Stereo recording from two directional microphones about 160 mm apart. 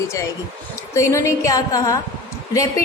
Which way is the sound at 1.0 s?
20° left (ahead or behind).